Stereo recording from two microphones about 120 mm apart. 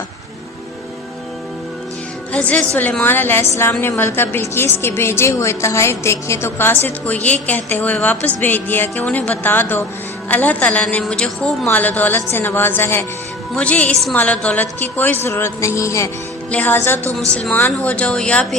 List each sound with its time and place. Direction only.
2.3 s a woman's voice: 10° left (ahead or behind)
16.5 s speech: 15° left (ahead or behind)